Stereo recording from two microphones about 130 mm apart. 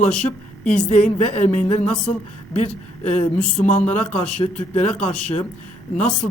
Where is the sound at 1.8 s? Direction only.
10° left (ahead or behind).